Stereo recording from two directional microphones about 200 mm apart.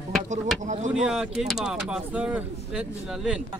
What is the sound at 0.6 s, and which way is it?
Speech, 35° right (ahead or behind).